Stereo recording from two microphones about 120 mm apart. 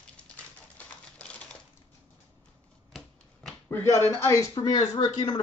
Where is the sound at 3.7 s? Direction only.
20° left (ahead or behind).